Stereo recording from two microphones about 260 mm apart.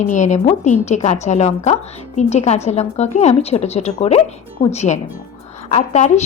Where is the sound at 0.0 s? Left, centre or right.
Left.